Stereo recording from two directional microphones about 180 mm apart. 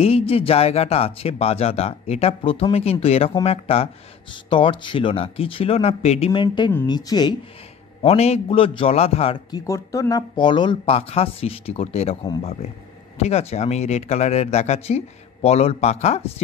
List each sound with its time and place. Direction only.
0.0 s speech: 35° left (ahead or behind)
8.0 s speech: 35° left (ahead or behind)
9.7 s speech: 20° left (ahead or behind); by 16.3 s 35° left (ahead or behind)